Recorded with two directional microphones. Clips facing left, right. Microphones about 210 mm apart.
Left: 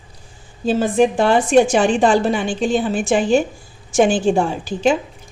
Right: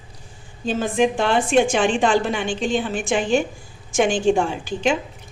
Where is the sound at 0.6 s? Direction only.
40° left (ahead or behind).